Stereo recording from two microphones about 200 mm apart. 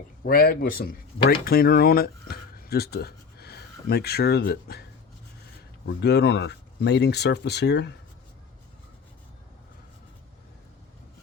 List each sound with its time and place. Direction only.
0.2 s a man's voice: 50° left (ahead or behind)
6.0 s speech: 60° left (ahead or behind)